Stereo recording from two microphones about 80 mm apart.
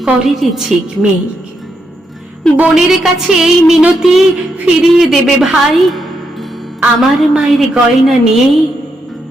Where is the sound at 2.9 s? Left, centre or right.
Centre.